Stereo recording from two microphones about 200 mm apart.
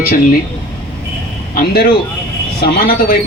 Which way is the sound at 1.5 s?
50° left (ahead or behind).